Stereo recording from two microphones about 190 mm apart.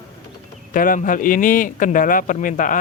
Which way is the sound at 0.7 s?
45° left (ahead or behind).